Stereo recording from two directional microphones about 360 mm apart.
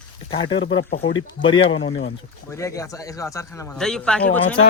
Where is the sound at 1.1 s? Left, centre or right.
Centre.